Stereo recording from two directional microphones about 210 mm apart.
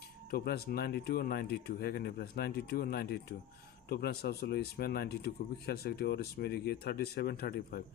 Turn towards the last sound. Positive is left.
turn(degrees=45)  # may be behind; listen again after turning